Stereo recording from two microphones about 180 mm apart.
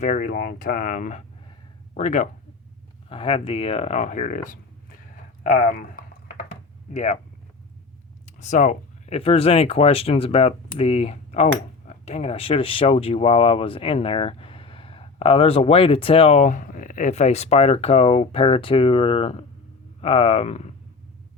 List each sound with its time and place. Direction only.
0.0 s speech: 45° left (ahead or behind)
6.9 s speech: 40° left (ahead or behind)
8.4 s speech: 40° left (ahead or behind)